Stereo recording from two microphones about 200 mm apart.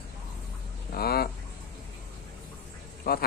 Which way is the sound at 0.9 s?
50° left (ahead or behind).